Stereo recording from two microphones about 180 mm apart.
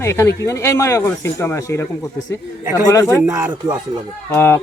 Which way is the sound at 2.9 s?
15° left (ahead or behind).